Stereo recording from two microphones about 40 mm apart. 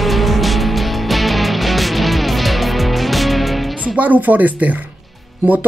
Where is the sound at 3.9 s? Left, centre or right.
Right.